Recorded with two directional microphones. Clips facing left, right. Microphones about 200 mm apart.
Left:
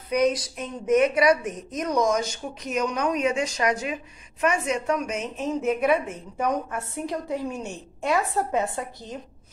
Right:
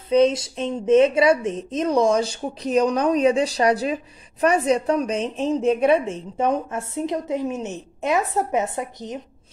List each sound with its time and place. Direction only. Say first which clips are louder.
0.1 s speech: right 5 dB; 25° right (ahead or behind)